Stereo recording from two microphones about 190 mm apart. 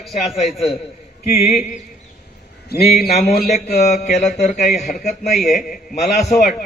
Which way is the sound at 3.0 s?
55° left (ahead or behind).